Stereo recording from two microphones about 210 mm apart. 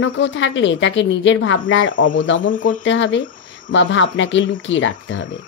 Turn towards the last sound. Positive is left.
turn(degrees=65)  # may be behind; listen again after turning